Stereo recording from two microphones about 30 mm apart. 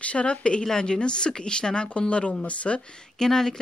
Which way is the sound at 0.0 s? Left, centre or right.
Left.